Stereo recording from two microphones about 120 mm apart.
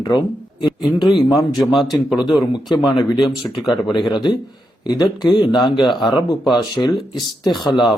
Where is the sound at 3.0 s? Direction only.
30° left (ahead or behind).